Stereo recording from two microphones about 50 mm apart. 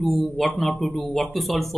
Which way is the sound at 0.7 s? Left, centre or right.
Centre.